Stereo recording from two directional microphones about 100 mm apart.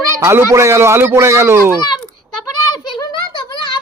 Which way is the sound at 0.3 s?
30° right (ahead or behind).